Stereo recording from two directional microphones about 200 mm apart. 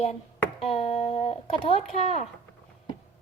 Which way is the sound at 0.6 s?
30° left (ahead or behind).